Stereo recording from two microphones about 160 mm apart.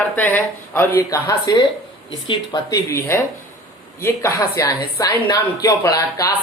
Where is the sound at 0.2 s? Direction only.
15° left (ahead or behind).